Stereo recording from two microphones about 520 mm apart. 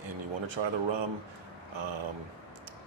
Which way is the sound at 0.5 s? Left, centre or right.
Right.